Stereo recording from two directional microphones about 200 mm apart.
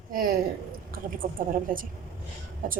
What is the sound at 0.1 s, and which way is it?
Speech, 45° right (ahead or behind).